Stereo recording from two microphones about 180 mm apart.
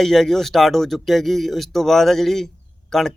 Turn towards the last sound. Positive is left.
turn(degrees=0)  # may be behind; listen again after turning